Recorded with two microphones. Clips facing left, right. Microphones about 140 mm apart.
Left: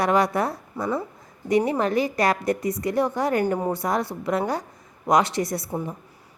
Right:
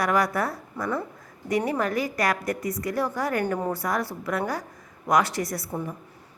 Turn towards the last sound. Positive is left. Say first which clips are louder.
# left 3 dB
turn(degrees=25)  # may be behind; listen again after turning